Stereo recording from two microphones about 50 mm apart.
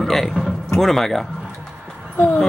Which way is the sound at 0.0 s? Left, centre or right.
Centre.